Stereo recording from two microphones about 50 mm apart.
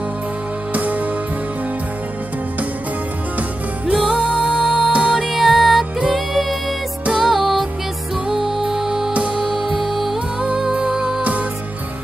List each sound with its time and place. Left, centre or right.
0.7 s music: right
3.9 s music: centre
4.2 s music: right
5.3 s music: centre
7.2 s music: centre
10.4 s music: centre